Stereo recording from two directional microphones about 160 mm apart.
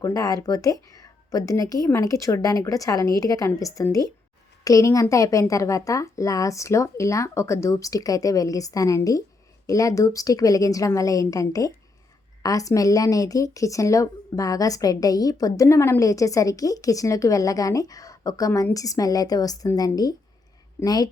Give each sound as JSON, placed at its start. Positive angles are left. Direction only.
{"t": 0.0, "sound": "a woman's voice", "side_deg": 20}